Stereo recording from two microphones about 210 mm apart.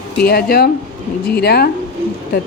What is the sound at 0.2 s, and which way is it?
Speech, 50° left (ahead or behind).